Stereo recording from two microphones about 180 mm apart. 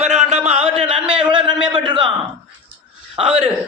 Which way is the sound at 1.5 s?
5° right (ahead or behind).